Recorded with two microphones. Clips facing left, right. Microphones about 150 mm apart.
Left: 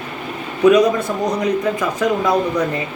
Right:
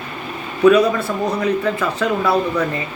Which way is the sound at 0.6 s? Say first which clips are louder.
Even; 15° left (ahead or behind).